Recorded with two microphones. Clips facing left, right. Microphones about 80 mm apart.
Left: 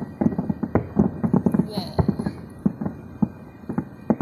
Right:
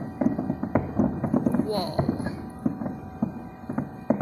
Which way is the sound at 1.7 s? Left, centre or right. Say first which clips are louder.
Right 4 dB; right.